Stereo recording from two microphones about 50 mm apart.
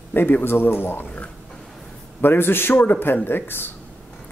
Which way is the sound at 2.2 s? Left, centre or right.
Left.